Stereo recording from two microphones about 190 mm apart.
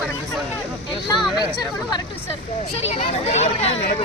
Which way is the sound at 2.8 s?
35° left (ahead or behind).